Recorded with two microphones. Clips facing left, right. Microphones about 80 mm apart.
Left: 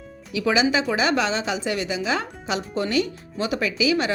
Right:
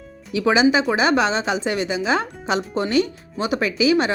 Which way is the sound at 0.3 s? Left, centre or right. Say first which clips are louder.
Right 4 dB; right.